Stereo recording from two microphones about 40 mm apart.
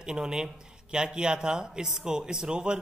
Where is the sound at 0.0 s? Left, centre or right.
Centre.